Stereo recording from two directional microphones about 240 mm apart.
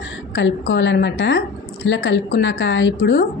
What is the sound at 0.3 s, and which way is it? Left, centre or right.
Speech, left.